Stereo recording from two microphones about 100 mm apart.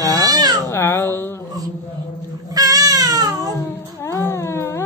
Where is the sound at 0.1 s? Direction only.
40° right (ahead or behind).